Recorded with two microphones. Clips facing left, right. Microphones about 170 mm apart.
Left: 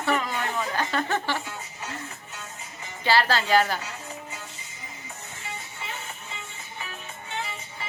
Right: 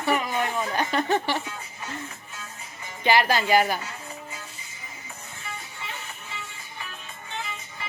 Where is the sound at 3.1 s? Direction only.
15° right (ahead or behind).